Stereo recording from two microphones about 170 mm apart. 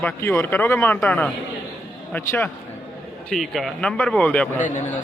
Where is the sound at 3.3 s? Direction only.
Centre (ahead or behind).